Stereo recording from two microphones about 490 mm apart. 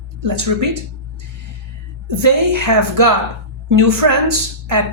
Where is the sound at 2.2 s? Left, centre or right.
Right.